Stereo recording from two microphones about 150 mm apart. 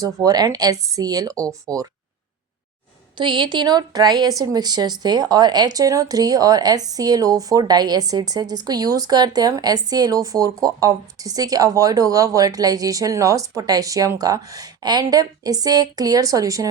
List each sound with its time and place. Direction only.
0.0 s a woman's voice: 25° right (ahead or behind)
3.2 s a woman's voice: 35° right (ahead or behind)